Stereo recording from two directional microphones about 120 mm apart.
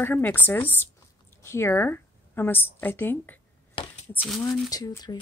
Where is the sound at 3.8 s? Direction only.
45° left (ahead or behind).